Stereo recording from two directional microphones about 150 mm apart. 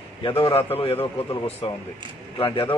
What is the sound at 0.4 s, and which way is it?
Speech, 40° left (ahead or behind).